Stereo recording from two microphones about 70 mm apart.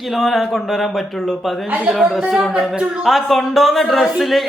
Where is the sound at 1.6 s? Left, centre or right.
Centre.